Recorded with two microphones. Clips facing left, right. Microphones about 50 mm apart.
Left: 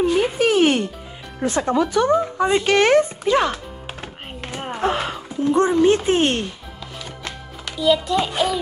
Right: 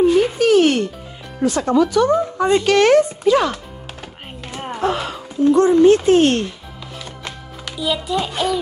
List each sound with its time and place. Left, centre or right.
0.2 s music: centre
1.4 s speech: left
2.3 s speech: centre
2.6 s speech: left
4.5 s a sound: centre
4.8 s a sound: left
5.5 s speech: left
7.8 s a child's voice: centre
8.3 s a child's voice: centre